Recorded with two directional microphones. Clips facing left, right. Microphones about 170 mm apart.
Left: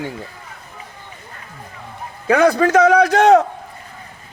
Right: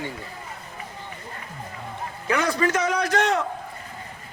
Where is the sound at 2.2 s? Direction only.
65° left (ahead or behind).